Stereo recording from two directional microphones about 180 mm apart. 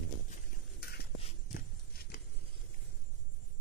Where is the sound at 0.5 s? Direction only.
60° left (ahead or behind).